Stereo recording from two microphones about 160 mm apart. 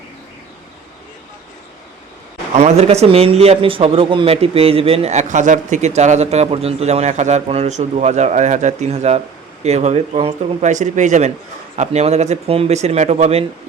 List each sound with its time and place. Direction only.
2.6 s speech: 45° right (ahead or behind)